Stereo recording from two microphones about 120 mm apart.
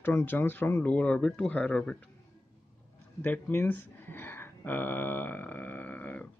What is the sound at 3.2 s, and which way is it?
Speech, 15° left (ahead or behind).